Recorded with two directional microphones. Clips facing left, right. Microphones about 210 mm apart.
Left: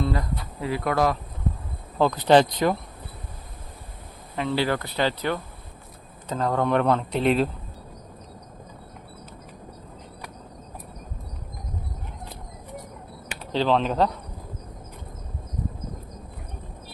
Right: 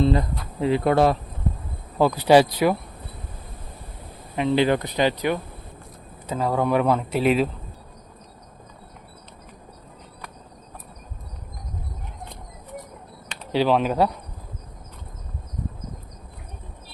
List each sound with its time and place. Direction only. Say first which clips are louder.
0.0 s speech: right 6 dB; 25° right (ahead or behind)
2.0 s speech: right 2 dB; 10° right (ahead or behind)
4.4 s speech: right 5 dB; 20° right (ahead or behind); by 7.5 s 5° right (ahead or behind)
13.5 s speech: right 2 dB; 10° right (ahead or behind)